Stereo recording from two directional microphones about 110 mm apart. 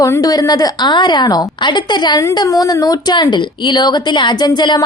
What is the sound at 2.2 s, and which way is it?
A woman's voice, 30° left (ahead or behind).